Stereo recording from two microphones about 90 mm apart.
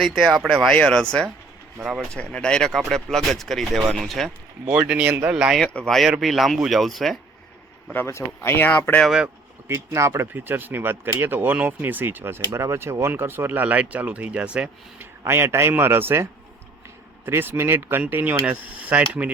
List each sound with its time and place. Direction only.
0.0 s speech: centre (ahead or behind)
4.7 s speech: 15° right (ahead or behind)
5.5 s speech: 10° left (ahead or behind)
7.9 s speech: 30° left (ahead or behind)
9.0 s speech: 10° right (ahead or behind)
9.6 s speech: 30° right (ahead or behind); by 15.0 s 10° right (ahead or behind)
15.2 s speech: 30° right (ahead or behind)